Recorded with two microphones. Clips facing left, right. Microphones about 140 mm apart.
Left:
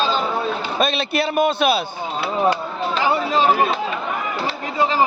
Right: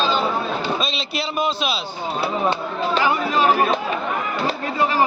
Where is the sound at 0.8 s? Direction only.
55° left (ahead or behind).